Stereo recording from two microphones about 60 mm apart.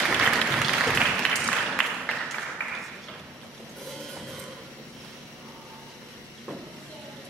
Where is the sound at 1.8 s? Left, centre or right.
Centre.